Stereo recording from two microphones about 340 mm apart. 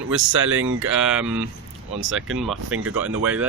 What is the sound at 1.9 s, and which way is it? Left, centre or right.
Speech, right.